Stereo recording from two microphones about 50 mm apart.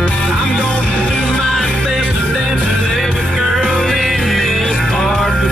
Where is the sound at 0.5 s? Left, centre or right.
Left.